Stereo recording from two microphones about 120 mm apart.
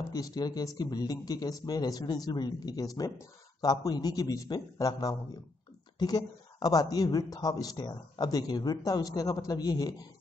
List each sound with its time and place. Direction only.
0.1 s speech: 35° left (ahead or behind)